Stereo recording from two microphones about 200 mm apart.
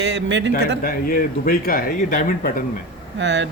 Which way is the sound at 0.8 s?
45° left (ahead or behind).